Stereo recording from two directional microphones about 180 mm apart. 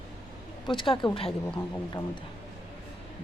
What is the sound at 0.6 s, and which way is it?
Speech, 25° left (ahead or behind).